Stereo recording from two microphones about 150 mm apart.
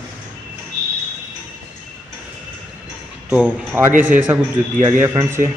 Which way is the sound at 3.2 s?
10° right (ahead or behind).